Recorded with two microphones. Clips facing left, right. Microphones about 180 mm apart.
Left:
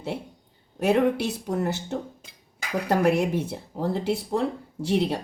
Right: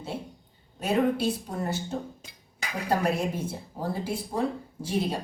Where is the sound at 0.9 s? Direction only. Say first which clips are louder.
Left 3 dB; 75° left (ahead or behind).